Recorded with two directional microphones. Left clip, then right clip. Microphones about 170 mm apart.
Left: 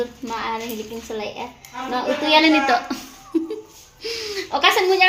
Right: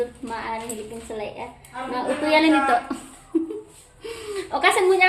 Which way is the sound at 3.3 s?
5° left (ahead or behind).